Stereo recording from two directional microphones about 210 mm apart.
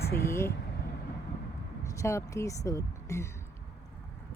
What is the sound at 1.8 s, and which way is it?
Speech, 15° left (ahead or behind).